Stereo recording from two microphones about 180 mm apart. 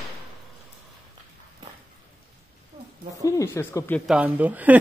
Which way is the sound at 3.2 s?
20° left (ahead or behind).